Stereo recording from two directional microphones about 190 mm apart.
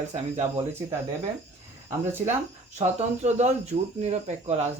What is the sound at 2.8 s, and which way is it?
Speech, 35° right (ahead or behind).